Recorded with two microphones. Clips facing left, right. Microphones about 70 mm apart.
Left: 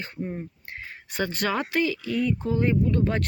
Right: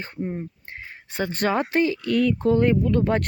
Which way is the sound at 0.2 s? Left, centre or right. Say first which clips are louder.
Right 3 dB; centre.